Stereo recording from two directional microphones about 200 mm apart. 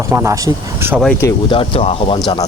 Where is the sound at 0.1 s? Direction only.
15° right (ahead or behind).